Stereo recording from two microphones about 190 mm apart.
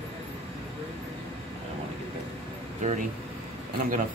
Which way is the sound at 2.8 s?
40° right (ahead or behind).